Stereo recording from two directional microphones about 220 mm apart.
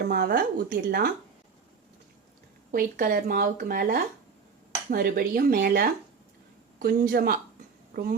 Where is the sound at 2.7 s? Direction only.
40° right (ahead or behind).